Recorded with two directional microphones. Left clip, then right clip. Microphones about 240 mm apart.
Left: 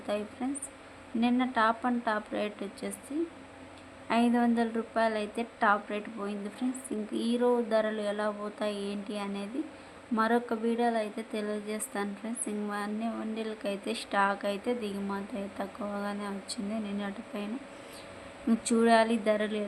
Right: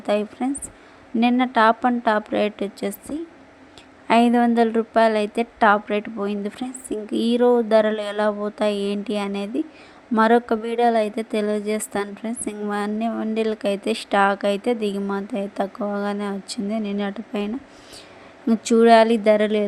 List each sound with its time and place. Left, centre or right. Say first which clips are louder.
0.0 s speech: right 11 dB; right
4.1 s speech: right 11 dB; right